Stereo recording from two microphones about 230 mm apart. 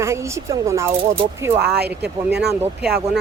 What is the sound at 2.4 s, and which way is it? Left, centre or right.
Speech, centre.